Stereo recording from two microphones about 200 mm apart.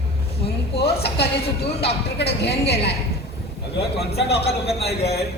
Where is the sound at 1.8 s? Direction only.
55° left (ahead or behind).